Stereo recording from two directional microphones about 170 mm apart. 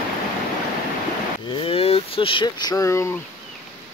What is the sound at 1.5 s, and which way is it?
Vehicle, 30° left (ahead or behind).